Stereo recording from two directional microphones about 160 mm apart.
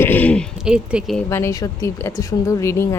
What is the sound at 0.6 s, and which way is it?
Speech, 5° right (ahead or behind).